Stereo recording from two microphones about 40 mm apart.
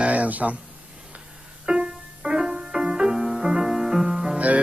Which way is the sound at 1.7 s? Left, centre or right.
Right.